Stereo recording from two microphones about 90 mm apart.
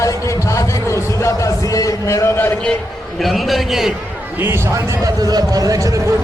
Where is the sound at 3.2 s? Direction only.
Centre (ahead or behind).